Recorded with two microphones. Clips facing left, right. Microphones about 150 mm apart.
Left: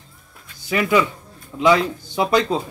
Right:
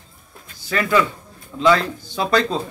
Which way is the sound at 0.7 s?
15° left (ahead or behind).